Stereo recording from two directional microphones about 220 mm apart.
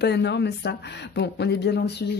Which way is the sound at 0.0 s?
50° left (ahead or behind).